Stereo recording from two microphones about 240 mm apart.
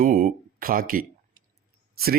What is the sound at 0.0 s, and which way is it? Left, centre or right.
A man's voice, right.